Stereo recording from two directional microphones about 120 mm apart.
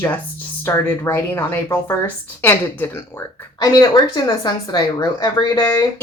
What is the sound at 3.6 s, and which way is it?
Speech, 35° left (ahead or behind).